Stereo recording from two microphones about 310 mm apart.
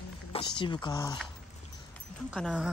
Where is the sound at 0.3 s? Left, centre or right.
Centre.